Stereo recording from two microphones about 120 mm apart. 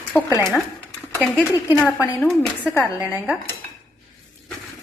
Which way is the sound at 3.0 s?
20° right (ahead or behind).